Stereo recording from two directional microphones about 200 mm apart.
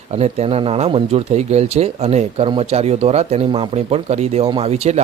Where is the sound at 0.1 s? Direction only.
30° right (ahead or behind).